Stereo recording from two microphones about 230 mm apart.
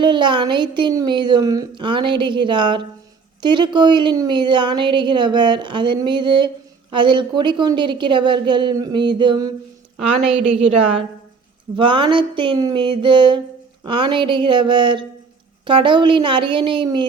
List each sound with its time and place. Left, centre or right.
0.0 s a woman's voice: centre
11.8 s a woman's voice: right